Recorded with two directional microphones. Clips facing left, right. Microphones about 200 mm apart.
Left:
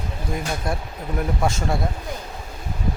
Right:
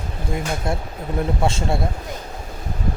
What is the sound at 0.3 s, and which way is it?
Speech, 25° right (ahead or behind).